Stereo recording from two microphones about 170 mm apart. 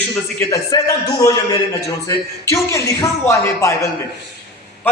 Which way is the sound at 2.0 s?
20° left (ahead or behind).